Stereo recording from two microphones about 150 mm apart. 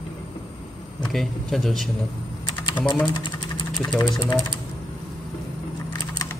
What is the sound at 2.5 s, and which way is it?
Typing, 30° left (ahead or behind).